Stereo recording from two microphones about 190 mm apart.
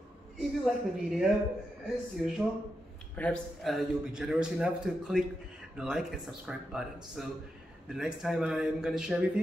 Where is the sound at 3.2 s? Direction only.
5° left (ahead or behind).